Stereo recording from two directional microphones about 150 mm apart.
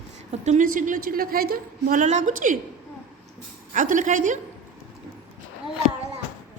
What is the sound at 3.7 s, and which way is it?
Speech, 60° right (ahead or behind).